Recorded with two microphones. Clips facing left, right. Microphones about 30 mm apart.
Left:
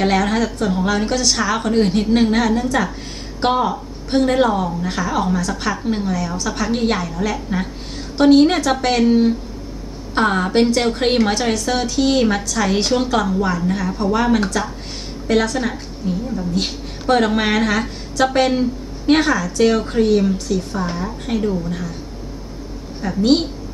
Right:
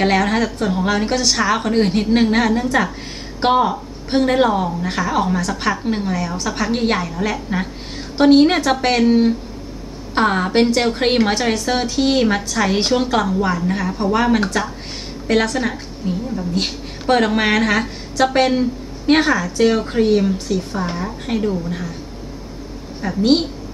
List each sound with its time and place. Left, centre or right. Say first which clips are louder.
0.0 s speech: right 1 dB; right
2.3 s a woman's voice: right 1 dB; right
3.6 s speech: right 1 dB; right
6.1 s a woman's voice: even; right; by 20.2 s centre
20.3 s a woman's voice: even; right
23.0 s a woman's voice: even; centre